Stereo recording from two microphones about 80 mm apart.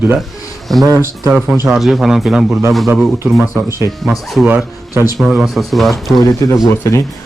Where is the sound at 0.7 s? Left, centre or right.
Centre.